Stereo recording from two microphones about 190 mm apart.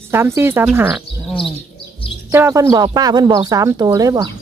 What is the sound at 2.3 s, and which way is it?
Speech, 15° right (ahead or behind).